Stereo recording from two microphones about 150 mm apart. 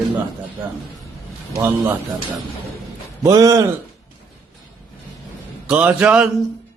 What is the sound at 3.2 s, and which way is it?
Speech, 20° right (ahead or behind).